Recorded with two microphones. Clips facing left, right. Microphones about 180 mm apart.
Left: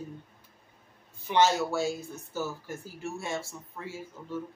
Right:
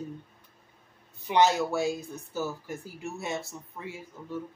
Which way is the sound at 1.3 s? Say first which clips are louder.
Right 1 dB; 15° right (ahead or behind).